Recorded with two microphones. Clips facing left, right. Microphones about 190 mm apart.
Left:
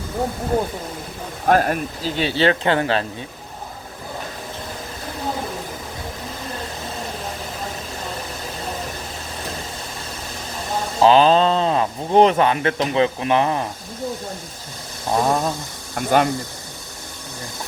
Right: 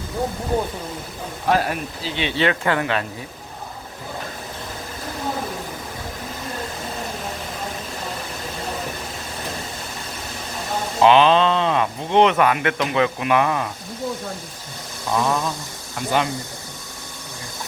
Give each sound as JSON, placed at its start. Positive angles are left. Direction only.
{"t": 1.5, "sound": "speech", "side_deg": 45}
{"t": 11.0, "sound": "speech", "side_deg": 35}
{"t": 15.1, "sound": "speech", "side_deg": 40}